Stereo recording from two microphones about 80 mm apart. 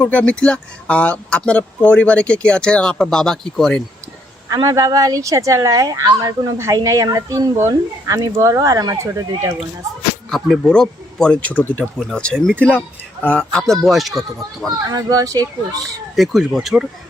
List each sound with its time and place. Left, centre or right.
0.1 s speech: centre
4.4 s speech: right
10.2 s speech: centre
11.3 s speech: left
12.1 s speech: centre
13.6 s speech: centre
14.8 s speech: right
16.1 s speech: centre